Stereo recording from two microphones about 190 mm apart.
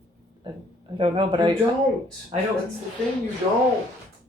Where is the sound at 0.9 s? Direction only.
25° right (ahead or behind).